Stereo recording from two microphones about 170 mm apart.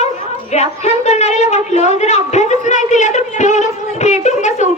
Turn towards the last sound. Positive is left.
turn(degrees=45)  # may be behind; listen again after turning